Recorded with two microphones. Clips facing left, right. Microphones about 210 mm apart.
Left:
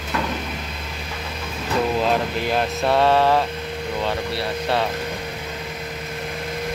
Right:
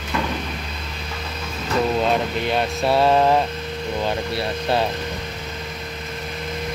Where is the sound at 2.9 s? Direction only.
10° right (ahead or behind).